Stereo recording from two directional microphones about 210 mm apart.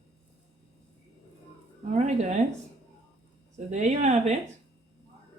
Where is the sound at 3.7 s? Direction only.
35° right (ahead or behind).